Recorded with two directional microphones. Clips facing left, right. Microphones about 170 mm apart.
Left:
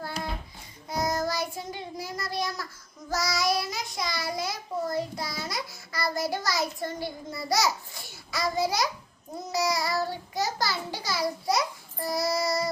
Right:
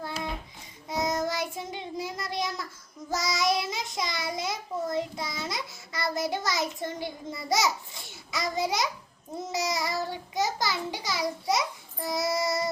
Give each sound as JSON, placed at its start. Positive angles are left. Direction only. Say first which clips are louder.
{"t": 0.9, "sound": "child singing", "louder": "even", "side_deg": -20}